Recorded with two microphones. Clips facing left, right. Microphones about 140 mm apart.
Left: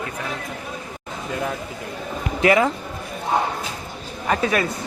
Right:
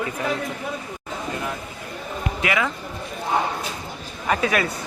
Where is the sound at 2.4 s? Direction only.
35° left (ahead or behind).